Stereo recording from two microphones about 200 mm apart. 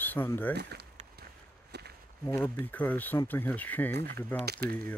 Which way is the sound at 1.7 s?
55° right (ahead or behind).